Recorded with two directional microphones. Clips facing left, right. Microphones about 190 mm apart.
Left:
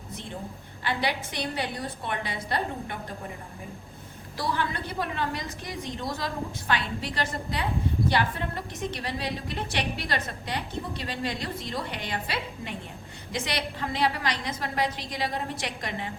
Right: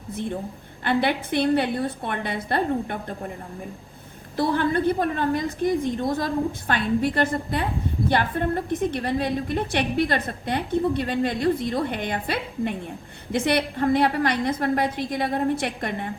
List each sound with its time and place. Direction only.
0.1 s a woman's voice: 55° right (ahead or behind)
4.4 s a woman's voice: 55° right (ahead or behind)